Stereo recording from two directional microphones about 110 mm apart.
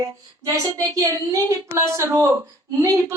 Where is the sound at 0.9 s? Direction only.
30° right (ahead or behind).